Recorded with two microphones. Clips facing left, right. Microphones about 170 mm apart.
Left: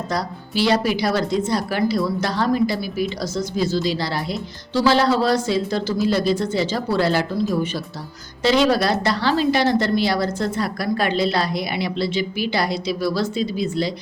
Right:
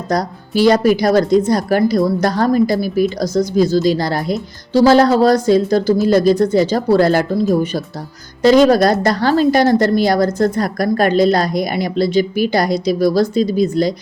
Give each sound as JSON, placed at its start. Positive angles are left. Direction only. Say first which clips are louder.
{"t": 0.1, "sound": "a woman's voice", "louder": "right 10 dB", "side_deg": -45}
{"t": 8.4, "sound": "a woman's voice", "louder": "right 7 dB", "side_deg": -45}